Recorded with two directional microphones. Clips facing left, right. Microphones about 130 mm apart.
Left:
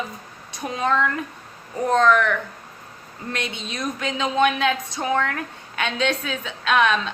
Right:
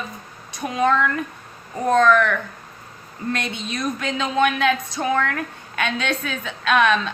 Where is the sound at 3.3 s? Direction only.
20° left (ahead or behind).